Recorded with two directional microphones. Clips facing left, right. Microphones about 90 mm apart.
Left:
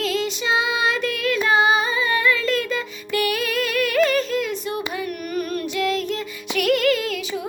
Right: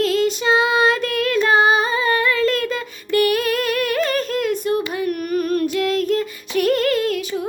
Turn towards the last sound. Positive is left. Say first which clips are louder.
# right 1 dB
turn(degrees=-35)  # may be behind; listen again after turning